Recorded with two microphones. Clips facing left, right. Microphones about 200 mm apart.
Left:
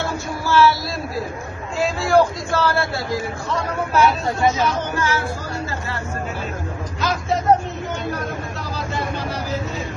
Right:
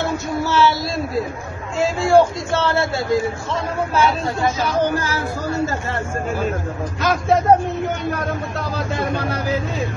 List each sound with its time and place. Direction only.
0.0 s a sound: 20° right (ahead or behind)
1.8 s a man's voice: 25° right (ahead or behind)
7.0 s speech: 50° right (ahead or behind)